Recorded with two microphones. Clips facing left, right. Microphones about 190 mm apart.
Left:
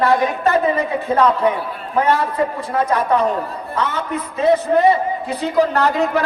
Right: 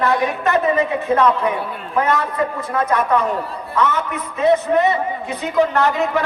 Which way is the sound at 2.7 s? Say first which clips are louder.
Left 1 dB; 30° left (ahead or behind).